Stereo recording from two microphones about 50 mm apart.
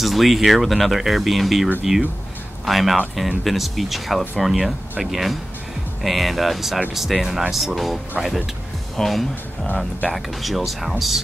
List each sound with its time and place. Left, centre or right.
0.0 s speech: centre